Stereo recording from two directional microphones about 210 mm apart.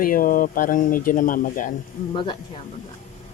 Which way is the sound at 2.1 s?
25° left (ahead or behind).